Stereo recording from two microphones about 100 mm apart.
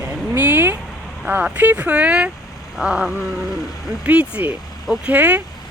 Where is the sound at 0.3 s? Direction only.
20° right (ahead or behind).